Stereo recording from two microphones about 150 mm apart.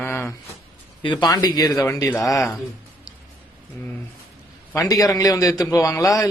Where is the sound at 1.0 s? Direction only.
30° left (ahead or behind).